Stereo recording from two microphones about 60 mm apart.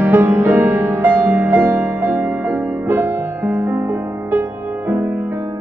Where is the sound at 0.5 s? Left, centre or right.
Right.